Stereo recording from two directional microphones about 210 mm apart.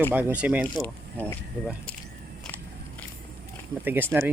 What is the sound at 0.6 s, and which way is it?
Speech, 5° left (ahead or behind).